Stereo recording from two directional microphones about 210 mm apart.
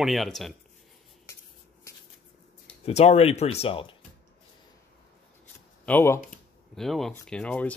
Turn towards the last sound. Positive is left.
turn(degrees=5)  # may be behind; listen again after turning